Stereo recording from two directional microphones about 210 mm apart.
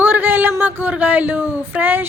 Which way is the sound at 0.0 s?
10° right (ahead or behind).